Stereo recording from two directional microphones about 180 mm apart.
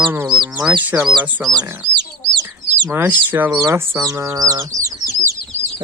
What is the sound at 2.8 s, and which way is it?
Speech, 10° right (ahead or behind).